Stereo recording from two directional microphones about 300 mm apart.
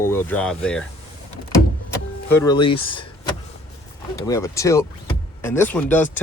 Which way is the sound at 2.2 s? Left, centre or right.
Centre.